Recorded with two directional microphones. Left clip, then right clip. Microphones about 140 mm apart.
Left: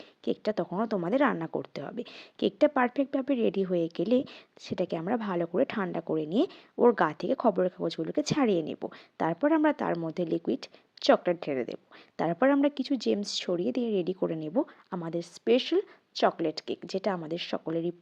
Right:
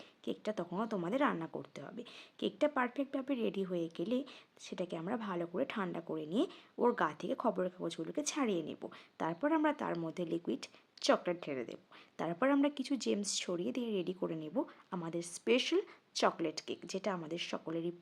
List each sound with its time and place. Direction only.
0.3 s speech: 40° left (ahead or behind)
9.9 s speech: 25° left (ahead or behind)
10.2 s speech: 35° left (ahead or behind)